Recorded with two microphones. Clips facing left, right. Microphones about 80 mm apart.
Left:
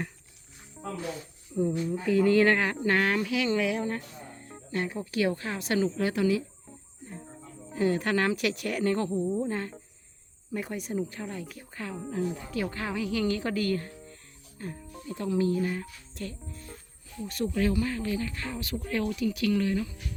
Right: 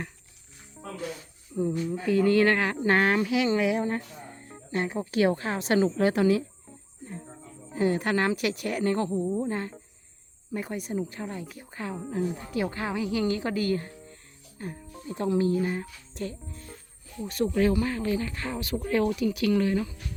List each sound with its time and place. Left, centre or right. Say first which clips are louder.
1.5 s speech: even; centre
2.8 s a woman's voice: right 6 dB; right
4.4 s music: right 2 dB; centre
4.8 s a woman's voice: right 4 dB; right
7.7 s a woman's voice: right 1 dB; centre
16.5 s speech: even; centre
17.6 s a woman's voice: right 3 dB; right
18.7 s speech: right 5 dB; right
19.2 s a woman's voice: right 2 dB; centre
19.5 s a woman's voice: right 3 dB; right